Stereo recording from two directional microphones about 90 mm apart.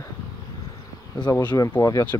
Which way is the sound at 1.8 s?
40° left (ahead or behind).